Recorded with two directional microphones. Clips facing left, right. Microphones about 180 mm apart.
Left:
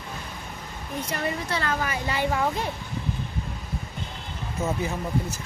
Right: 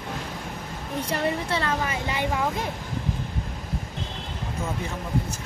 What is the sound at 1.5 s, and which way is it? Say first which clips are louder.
Speech: right 1 dB; 25° right (ahead or behind).